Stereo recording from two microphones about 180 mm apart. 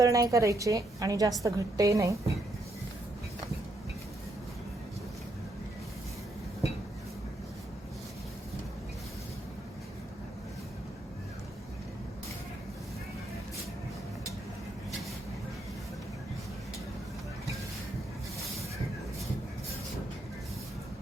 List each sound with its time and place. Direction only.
0.0 s a woman's voice: 20° right (ahead or behind)